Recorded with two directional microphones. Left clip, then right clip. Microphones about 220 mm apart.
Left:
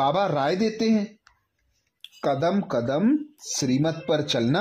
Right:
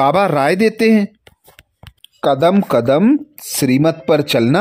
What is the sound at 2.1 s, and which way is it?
Speech, 30° right (ahead or behind).